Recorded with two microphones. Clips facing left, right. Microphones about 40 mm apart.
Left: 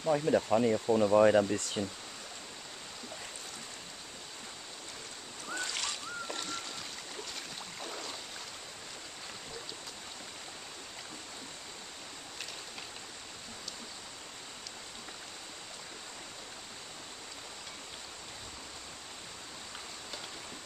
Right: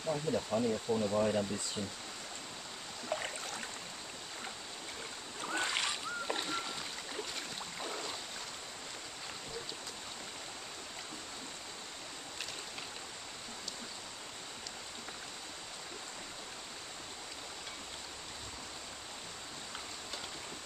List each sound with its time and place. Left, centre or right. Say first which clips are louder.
0.0 s speech: left 6 dB; left
1.1 s speech: left 10 dB; left
1.8 s speech: left 5 dB; left
5.5 s boat: right 2 dB; right
7.8 s a sound: right 1 dB; centre